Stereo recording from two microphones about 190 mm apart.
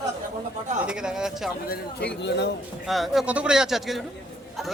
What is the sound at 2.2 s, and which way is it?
Speech, 60° left (ahead or behind).